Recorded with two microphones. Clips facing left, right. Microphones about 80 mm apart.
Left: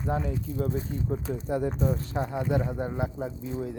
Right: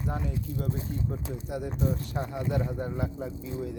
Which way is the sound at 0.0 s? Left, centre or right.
Left.